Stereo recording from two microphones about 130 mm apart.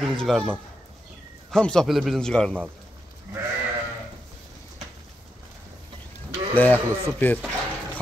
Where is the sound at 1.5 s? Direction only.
5° left (ahead or behind).